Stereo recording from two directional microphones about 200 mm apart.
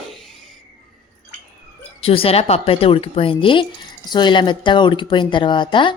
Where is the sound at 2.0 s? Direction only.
30° left (ahead or behind).